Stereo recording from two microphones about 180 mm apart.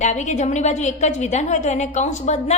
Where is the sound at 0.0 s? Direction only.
40° left (ahead or behind).